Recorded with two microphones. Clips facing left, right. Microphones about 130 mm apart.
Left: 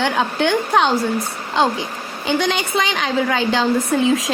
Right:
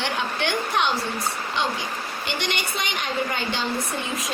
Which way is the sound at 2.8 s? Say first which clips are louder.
Left 7 dB; 90° left.